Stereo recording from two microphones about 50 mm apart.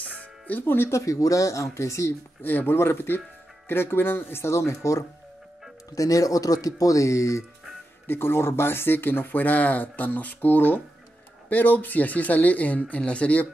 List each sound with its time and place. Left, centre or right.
0.0 s music: left
0.8 s speech: left
2.4 s speech: left
6.9 s speech: left
8.1 s speech: left